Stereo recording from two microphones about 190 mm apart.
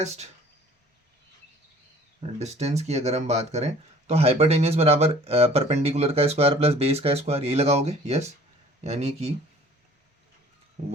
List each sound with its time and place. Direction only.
2.4 s speech: 35° right (ahead or behind)